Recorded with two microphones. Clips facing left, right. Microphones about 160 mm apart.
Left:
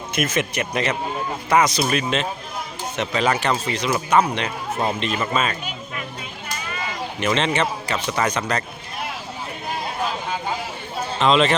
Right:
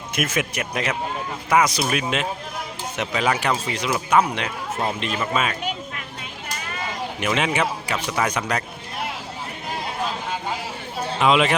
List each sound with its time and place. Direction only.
0.1 s a man's voice: 10° right (ahead or behind)
7.2 s a man's voice: 10° right (ahead or behind)
11.2 s a man's voice: 10° right (ahead or behind)